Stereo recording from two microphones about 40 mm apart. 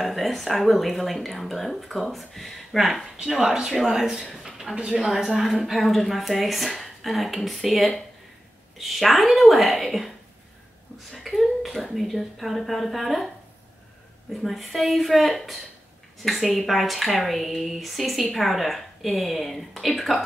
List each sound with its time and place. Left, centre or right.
0.0 s speech: centre
3.3 s speech: centre
4.3 s speech: centre
4.7 s speech: right
5.0 s speech: centre
14.4 s speech: centre